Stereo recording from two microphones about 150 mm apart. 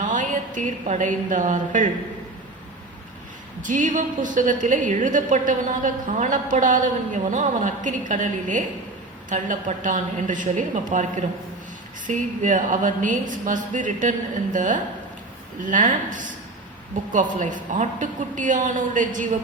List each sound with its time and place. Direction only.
0.1 s speech: 55° right (ahead or behind)
3.6 s a woman's voice: 60° right (ahead or behind)